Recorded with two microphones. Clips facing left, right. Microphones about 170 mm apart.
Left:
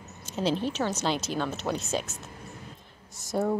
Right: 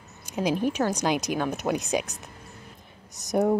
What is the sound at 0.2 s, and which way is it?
A woman's voice, 15° right (ahead or behind).